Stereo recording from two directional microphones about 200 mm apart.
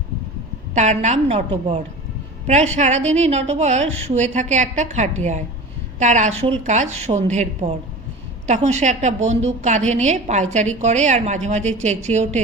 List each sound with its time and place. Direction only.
0.7 s a woman's voice: 35° right (ahead or behind)